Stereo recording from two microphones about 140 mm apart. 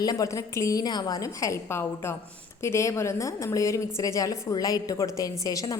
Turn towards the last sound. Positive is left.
turn(degrees=25)  # may be behind; listen again after turning